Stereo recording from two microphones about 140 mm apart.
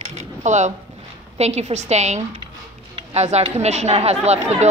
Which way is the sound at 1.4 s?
50° right (ahead or behind).